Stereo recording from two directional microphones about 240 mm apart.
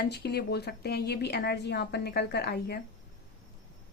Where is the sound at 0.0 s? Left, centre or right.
Left.